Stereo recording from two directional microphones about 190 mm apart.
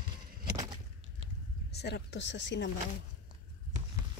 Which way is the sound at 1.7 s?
60° left (ahead or behind).